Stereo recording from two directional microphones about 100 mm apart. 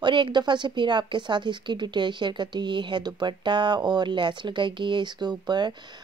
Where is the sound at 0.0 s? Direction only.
50° right (ahead or behind).